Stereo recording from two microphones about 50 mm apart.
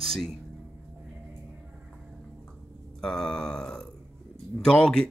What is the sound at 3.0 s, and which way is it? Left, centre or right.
Speech, centre.